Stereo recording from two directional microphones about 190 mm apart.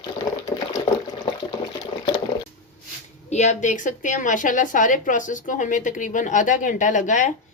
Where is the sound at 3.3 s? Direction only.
40° left (ahead or behind).